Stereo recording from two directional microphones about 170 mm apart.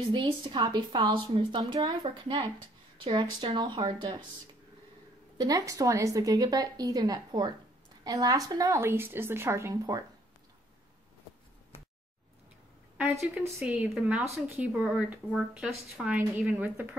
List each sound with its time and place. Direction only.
0.1 s speech: 30° right (ahead or behind)
5.4 s a woman's voice: 20° right (ahead or behind)
13.2 s a woman's voice: 15° right (ahead or behind)